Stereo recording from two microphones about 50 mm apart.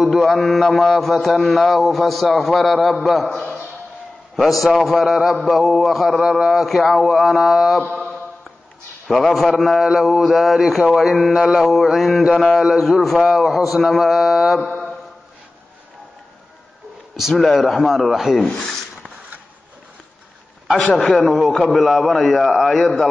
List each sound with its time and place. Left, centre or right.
0.0 s mantra: centre
9.0 s mantra: centre
9.8 s mantra: centre
17.3 s mantra: centre
20.9 s a man's voice: centre
21.2 s mantra: centre